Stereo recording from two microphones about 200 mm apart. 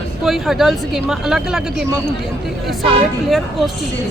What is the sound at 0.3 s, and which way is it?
Speech, centre (ahead or behind).